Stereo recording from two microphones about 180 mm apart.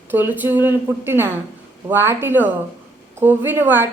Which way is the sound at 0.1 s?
10° right (ahead or behind).